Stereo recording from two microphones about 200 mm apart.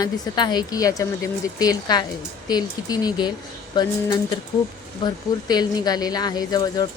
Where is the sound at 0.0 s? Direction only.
20° left (ahead or behind).